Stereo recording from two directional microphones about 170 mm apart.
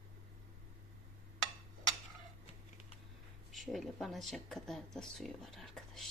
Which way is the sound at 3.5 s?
Centre (ahead or behind).